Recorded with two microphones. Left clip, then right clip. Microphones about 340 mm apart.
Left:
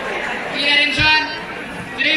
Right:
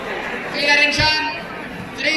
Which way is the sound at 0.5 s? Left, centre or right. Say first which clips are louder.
Even; centre.